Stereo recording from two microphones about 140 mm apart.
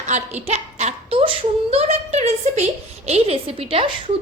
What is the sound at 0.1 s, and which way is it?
A woman's voice, 55° right (ahead or behind).